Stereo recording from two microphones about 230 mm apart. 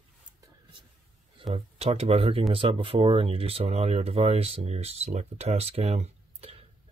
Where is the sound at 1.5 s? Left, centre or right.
Right.